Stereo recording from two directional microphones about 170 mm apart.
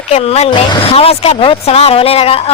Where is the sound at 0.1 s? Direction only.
40° left (ahead or behind).